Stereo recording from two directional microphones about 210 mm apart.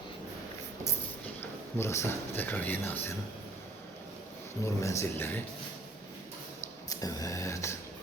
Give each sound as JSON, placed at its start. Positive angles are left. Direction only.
{"t": 1.4, "sound": "speech", "side_deg": 15}
{"t": 4.6, "sound": "speech", "side_deg": 15}
{"t": 6.8, "sound": "a sound", "side_deg": 15}